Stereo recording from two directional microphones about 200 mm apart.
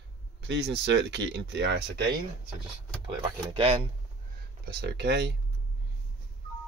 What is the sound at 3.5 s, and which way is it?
Speech, 25° right (ahead or behind).